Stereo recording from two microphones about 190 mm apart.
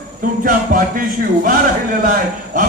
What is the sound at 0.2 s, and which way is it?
Music, 45° right (ahead or behind).